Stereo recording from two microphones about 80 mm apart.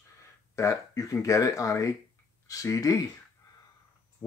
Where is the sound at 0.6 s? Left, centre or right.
Left.